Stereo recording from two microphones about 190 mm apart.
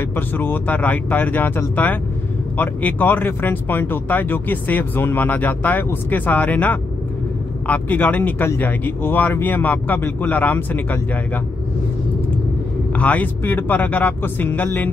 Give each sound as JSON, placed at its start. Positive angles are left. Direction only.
{"t": 0.0, "sound": "speech", "side_deg": 10}
{"t": 12.9, "sound": "speech", "side_deg": 10}